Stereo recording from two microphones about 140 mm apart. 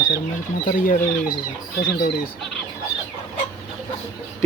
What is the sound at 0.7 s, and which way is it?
Speech, 75° left (ahead or behind).